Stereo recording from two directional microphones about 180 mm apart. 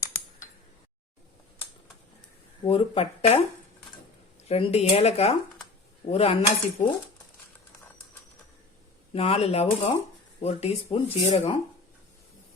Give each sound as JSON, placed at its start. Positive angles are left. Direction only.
{"t": 2.6, "sound": "speech", "side_deg": 30}
{"t": 4.4, "sound": "speech", "side_deg": 35}
{"t": 9.1, "sound": "speech", "side_deg": 30}